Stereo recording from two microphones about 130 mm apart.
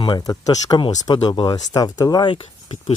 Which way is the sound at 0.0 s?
35° left (ahead or behind).